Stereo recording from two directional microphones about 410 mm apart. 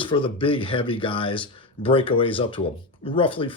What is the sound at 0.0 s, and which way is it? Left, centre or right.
Speech, centre.